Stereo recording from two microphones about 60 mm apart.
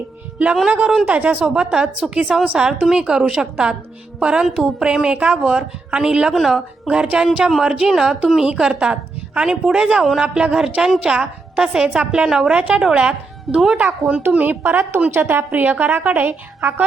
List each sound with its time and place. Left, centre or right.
1.0 s a woman's voice: right; by 6.6 s centre
6.8 s a woman's voice: centre
14.3 s a woman's voice: right